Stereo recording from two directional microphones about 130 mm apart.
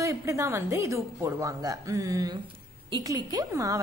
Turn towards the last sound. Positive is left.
turn(degrees=-25)  # may be behind; listen again after turning